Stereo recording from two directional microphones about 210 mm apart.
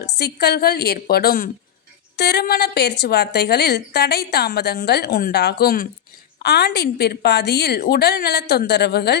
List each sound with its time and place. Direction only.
0.0 s a woman's voice: 50° left (ahead or behind)